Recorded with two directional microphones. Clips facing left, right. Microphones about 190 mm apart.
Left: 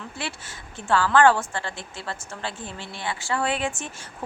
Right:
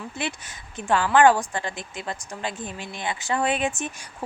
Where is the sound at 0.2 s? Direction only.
20° right (ahead or behind).